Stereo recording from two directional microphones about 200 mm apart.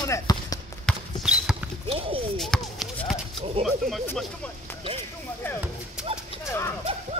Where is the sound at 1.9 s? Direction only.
25° right (ahead or behind).